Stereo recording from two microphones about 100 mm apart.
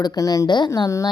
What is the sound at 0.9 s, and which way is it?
Speech, 30° left (ahead or behind).